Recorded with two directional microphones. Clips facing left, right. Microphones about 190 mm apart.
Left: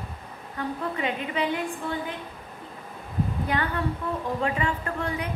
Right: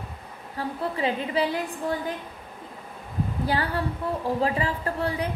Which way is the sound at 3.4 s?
30° right (ahead or behind).